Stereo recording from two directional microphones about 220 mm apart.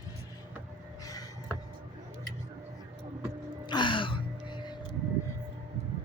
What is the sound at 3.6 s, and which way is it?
Music, 20° left (ahead or behind).